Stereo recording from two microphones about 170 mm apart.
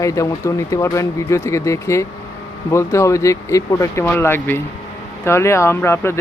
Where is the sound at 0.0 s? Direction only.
20° left (ahead or behind).